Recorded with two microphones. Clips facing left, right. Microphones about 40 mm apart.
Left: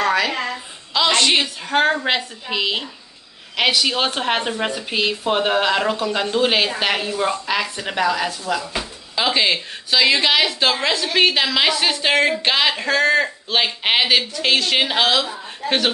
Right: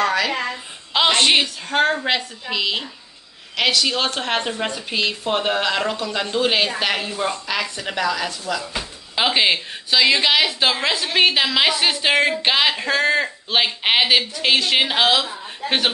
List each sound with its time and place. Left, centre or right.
0.0 s a sound: centre
0.9 s a woman's voice: right
1.4 s a woman's voice: centre
9.1 s speech: centre
9.8 s a woman's voice: centre